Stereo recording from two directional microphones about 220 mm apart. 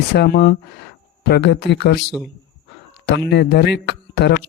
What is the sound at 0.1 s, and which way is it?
Speech, 50° left (ahead or behind).